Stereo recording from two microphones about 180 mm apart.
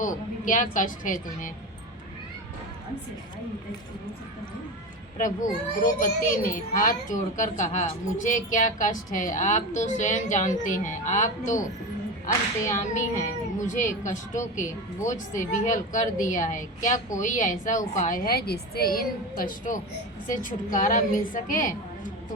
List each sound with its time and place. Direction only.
0.0 s a child's voice: 45° left (ahead or behind)
5.2 s a child's voice: 45° left (ahead or behind)
12.7 s a child's voice: 40° left (ahead or behind)